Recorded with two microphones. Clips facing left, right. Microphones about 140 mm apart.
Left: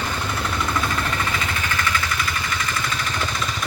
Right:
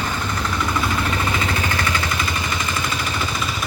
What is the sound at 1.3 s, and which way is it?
Vehicle, 30° right (ahead or behind).